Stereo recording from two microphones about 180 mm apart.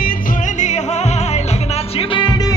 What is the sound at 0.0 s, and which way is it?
Music, 45° left (ahead or behind).